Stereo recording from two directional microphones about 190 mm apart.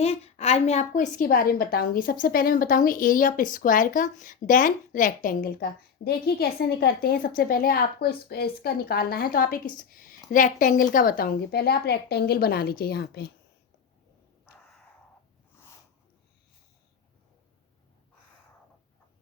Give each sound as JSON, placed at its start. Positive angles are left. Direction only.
{"t": 0.0, "sound": "a woman's voice", "side_deg": 35}